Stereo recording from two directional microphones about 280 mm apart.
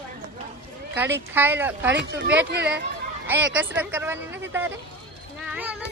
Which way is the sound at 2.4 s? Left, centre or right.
Right.